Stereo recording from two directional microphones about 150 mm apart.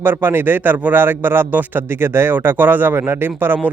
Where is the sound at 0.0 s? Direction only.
15° right (ahead or behind).